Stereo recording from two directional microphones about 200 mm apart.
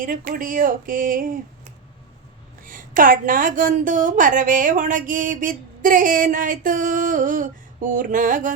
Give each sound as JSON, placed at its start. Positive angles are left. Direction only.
{"t": 0.0, "sound": "speech", "side_deg": -45}
{"t": 2.6, "sound": "a woman's voice", "side_deg": -45}